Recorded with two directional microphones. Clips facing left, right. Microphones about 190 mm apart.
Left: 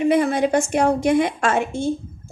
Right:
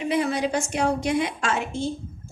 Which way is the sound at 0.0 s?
50° left (ahead or behind).